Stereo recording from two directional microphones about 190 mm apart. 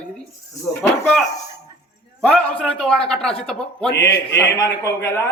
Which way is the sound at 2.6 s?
5° left (ahead or behind).